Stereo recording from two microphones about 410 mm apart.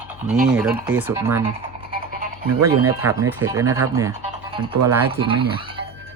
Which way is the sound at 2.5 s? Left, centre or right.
Right.